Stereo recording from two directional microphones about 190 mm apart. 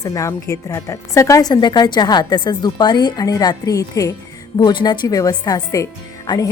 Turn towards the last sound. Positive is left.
turn(degrees=20)  # may be behind; listen again after turning